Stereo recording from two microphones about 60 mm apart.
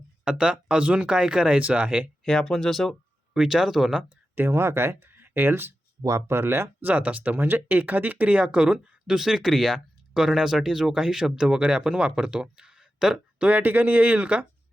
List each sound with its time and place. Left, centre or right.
0.3 s speech: centre
2.2 s speech: centre
4.4 s speech: right
6.0 s speech: right
6.8 s speech: right; by 13.2 s centre
13.4 s speech: right